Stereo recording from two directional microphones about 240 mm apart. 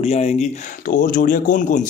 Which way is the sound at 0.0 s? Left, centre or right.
Left.